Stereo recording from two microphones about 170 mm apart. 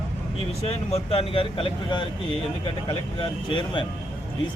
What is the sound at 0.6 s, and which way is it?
Speech, 35° left (ahead or behind).